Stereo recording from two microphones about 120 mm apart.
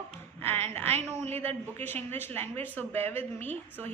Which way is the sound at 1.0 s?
20° left (ahead or behind).